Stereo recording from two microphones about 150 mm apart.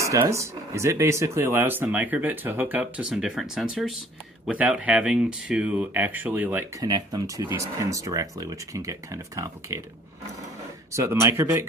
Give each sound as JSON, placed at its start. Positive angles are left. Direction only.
{"t": 0.0, "sound": "speech", "side_deg": -20}
{"t": 6.8, "sound": "speech", "side_deg": -25}
{"t": 10.9, "sound": "speech", "side_deg": -20}